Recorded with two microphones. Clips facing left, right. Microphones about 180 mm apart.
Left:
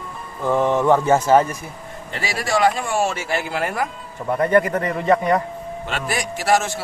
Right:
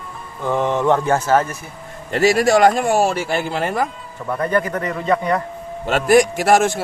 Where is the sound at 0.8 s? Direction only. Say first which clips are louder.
Left 1 dB; 5° left (ahead or behind).